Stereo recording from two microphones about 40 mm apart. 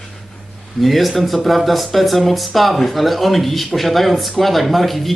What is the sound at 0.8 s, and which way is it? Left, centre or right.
Speech, centre.